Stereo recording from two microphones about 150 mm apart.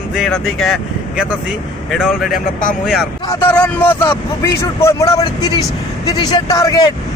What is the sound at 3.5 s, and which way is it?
Speech, 10° left (ahead or behind).